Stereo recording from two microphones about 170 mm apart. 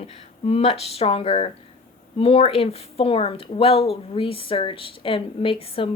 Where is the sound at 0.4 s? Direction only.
35° left (ahead or behind).